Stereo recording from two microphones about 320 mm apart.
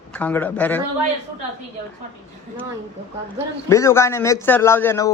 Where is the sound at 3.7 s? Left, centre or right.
Centre.